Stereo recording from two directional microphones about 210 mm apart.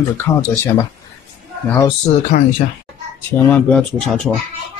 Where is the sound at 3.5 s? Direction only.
5° left (ahead or behind).